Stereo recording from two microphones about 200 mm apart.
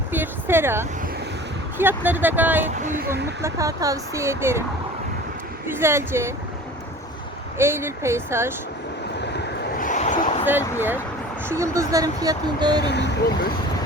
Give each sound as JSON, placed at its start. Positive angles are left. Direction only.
{"t": 0.1, "sound": "a sound", "side_deg": -10}
{"t": 1.8, "sound": "speech", "side_deg": -10}
{"t": 5.6, "sound": "speech", "side_deg": -10}
{"t": 7.6, "sound": "speech", "side_deg": -10}
{"t": 9.7, "sound": "vehicle", "side_deg": 40}
{"t": 10.8, "sound": "speech", "side_deg": -10}
{"t": 12.8, "sound": "speech", "side_deg": 60}